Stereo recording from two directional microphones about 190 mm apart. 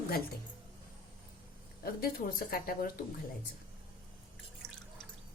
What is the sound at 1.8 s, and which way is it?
A woman's voice, 50° left (ahead or behind).